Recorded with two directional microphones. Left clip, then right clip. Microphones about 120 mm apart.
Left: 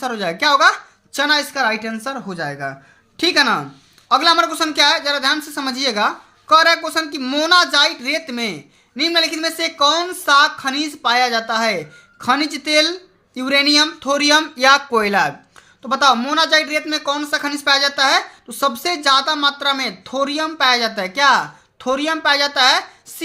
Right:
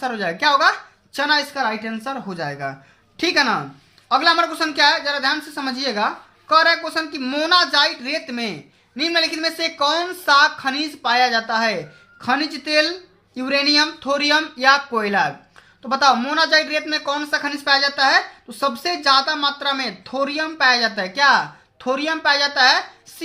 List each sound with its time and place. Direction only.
0.0 s speech: 35° left (ahead or behind)
2.2 s speech: 30° left (ahead or behind); by 15.3 s 50° left (ahead or behind)
15.8 s speech: 30° left (ahead or behind)